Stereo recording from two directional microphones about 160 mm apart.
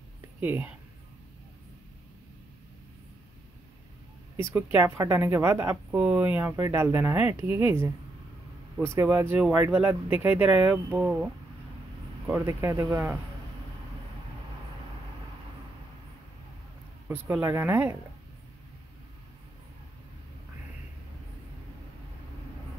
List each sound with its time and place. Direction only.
0.4 s a woman's voice: 10° right (ahead or behind)
4.4 s a woman's voice: 15° right (ahead or behind)
17.1 s a woman's voice: 10° right (ahead or behind)